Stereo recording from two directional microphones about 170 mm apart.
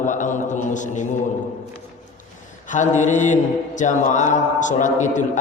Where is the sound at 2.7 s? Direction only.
45° left (ahead or behind).